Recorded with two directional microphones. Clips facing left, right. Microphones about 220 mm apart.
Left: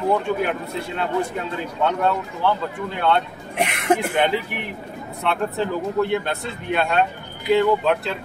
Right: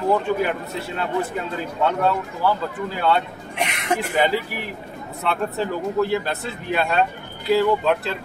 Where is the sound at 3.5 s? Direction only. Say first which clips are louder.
Left 4 dB; 55° left (ahead or behind).